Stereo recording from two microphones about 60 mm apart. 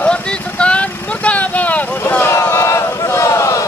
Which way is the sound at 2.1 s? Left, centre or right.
Left.